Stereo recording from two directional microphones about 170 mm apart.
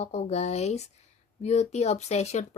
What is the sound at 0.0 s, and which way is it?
Speech, 40° left (ahead or behind).